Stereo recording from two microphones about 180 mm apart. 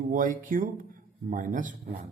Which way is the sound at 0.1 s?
50° right (ahead or behind).